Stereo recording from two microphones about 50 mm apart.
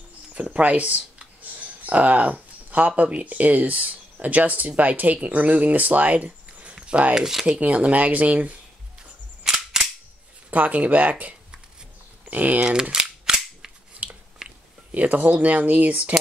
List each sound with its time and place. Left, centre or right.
0.3 s a sound: right
3.0 s speech: right
6.7 s a sound: right
7.2 s rub: centre
7.6 s speech: right
9.4 s cap gun: centre
10.5 s speech: right
12.9 s cap gun: centre
14.0 s chewing: right
14.9 s speech: right